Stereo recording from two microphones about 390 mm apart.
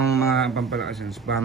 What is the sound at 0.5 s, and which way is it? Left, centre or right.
Speech, right.